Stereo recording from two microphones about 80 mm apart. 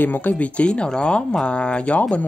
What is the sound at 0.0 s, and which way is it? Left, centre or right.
Speech, left.